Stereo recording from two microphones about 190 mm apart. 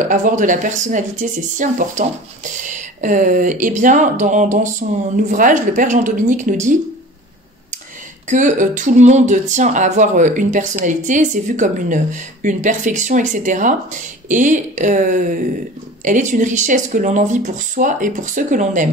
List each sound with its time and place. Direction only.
0.0 s speech: 40° right (ahead or behind)
8.3 s speech: 40° right (ahead or behind)